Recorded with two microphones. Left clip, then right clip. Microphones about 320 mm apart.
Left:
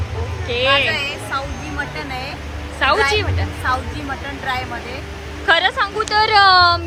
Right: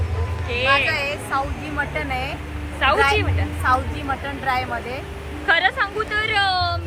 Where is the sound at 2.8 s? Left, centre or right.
Centre.